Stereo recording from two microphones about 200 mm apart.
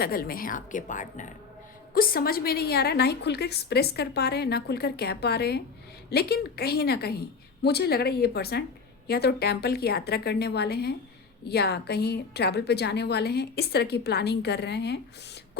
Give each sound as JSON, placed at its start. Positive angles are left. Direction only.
{"t": 0.0, "sound": "a woman's voice", "side_deg": 50}